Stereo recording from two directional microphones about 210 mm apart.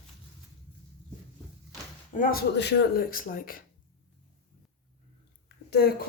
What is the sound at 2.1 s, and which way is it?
A woman's voice, 40° left (ahead or behind).